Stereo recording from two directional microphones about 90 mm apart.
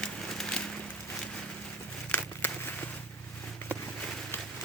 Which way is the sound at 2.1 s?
25° left (ahead or behind).